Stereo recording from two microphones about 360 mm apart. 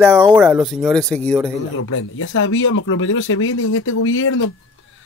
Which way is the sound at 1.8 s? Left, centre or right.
Left.